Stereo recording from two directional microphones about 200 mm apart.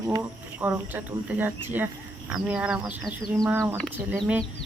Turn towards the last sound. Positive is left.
turn(degrees=-10)  # may be behind; listen again after turning